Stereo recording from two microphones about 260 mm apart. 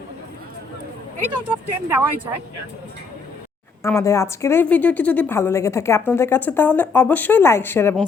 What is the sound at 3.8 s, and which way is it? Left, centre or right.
A woman's voice, centre.